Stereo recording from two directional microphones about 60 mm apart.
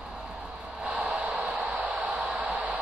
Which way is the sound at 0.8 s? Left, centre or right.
Right.